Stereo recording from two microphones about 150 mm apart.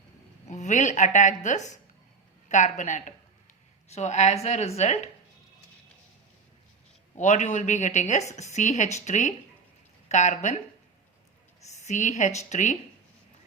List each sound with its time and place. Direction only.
0.4 s speech: 50° left (ahead or behind)
7.2 s speech: 55° left (ahead or behind)
11.6 s speech: 50° left (ahead or behind)